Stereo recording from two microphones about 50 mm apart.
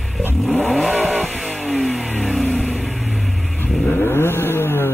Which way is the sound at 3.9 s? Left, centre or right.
Left.